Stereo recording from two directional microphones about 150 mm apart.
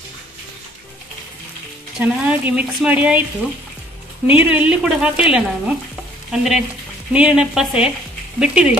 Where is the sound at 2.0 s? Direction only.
10° right (ahead or behind).